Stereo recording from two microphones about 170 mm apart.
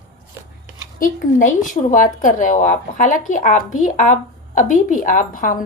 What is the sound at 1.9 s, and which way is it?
Speech, 50° left (ahead or behind).